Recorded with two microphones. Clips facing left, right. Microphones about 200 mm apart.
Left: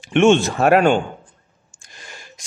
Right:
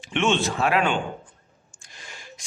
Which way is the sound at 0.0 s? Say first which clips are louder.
Left 9 dB; 50° left (ahead or behind).